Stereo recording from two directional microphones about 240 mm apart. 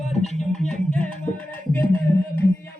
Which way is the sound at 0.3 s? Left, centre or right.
Centre.